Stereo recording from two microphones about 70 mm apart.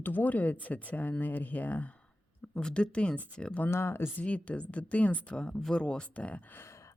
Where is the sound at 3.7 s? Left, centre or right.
Left.